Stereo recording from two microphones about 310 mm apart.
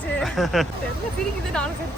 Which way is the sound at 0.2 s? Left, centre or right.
Centre.